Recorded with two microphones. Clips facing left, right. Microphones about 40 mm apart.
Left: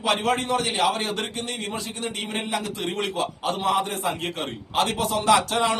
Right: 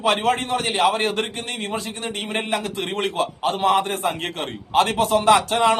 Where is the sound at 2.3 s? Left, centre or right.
Right.